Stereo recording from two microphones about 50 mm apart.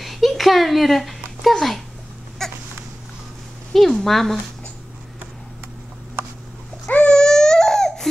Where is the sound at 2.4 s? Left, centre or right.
Centre.